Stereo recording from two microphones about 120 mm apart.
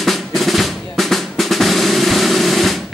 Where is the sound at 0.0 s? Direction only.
Centre (ahead or behind).